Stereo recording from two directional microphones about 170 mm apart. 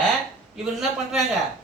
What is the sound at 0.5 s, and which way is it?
Speech, 5° right (ahead or behind).